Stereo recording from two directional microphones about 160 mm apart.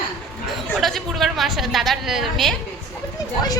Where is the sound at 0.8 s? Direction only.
Centre (ahead or behind).